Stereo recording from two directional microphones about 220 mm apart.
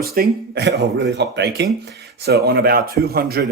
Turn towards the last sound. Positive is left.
turn(degrees=-45)  # may be behind; listen again after turning